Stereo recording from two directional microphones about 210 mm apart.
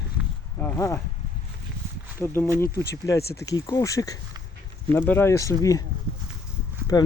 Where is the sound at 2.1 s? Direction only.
10° left (ahead or behind).